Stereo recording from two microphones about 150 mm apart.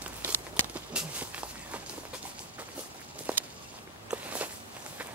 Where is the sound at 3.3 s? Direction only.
10° right (ahead or behind).